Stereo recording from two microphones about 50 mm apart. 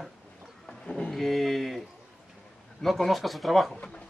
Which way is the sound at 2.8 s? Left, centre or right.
Centre.